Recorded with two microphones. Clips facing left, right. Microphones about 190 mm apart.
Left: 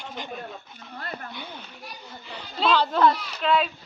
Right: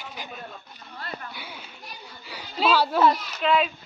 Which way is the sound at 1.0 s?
45° left (ahead or behind).